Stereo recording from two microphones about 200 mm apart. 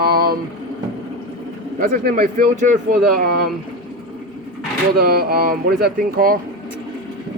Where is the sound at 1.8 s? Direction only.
45° right (ahead or behind).